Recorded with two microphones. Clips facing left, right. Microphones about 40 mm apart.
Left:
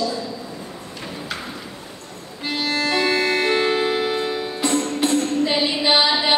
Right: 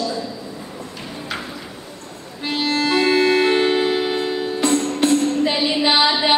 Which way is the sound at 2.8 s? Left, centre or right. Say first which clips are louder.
Right 4 dB; centre.